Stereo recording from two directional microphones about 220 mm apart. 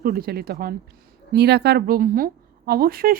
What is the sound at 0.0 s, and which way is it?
A woman's voice, 45° right (ahead or behind).